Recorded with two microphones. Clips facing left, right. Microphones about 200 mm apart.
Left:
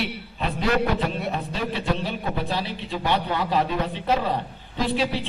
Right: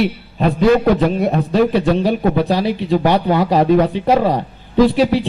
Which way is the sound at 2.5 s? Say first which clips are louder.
Right 12 dB; 40° right (ahead or behind).